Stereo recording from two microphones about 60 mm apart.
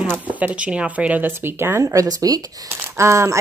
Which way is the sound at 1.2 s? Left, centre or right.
Right.